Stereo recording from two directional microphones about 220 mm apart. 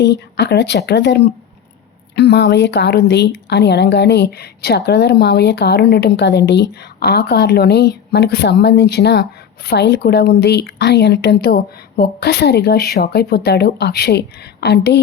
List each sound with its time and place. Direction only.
0.0 s speech: 50° left (ahead or behind)